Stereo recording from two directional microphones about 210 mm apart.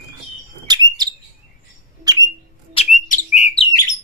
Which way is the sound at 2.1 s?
15° right (ahead or behind).